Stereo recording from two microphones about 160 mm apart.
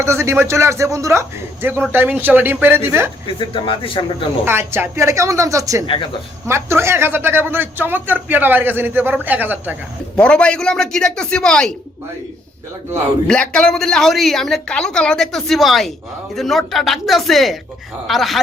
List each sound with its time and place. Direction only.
0.0 s speech: 15° right (ahead or behind)
3.3 s speech: 30° left (ahead or behind)
4.4 s speech: 15° right (ahead or behind)
5.8 s speech: 30° left (ahead or behind)
6.5 s speech: 15° right (ahead or behind)
10.2 s a woman's voice: 5° left (ahead or behind)
13.2 s a woman's voice: 5° left (ahead or behind)